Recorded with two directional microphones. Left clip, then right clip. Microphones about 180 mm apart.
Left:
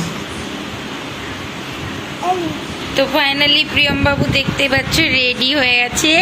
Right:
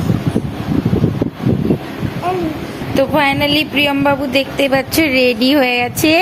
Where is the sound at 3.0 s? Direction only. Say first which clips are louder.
Right 1 dB; 45° right (ahead or behind).